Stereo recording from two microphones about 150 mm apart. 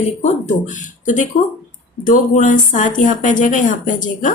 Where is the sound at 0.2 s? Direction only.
50° left (ahead or behind).